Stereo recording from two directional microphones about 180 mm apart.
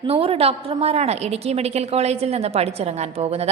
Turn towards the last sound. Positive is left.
turn(degrees=-35)  # may be behind; listen again after turning